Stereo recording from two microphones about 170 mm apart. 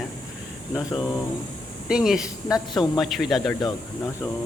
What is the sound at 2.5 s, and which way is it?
Speech, 25° left (ahead or behind).